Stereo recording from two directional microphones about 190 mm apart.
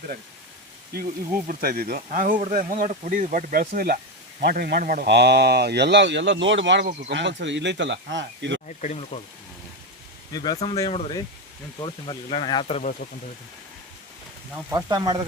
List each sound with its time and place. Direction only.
1.5 s speech: 50° right (ahead or behind); by 8.6 s 70° right (ahead or behind)
8.6 s speech: 40° left (ahead or behind)
10.3 s speech: 20° left (ahead or behind)
14.7 s speech: 20° right (ahead or behind)